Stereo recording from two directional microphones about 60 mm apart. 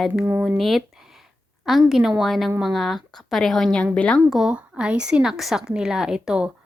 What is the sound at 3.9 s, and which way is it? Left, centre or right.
Speech, left.